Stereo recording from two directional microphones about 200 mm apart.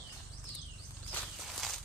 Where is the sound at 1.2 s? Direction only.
Centre (ahead or behind).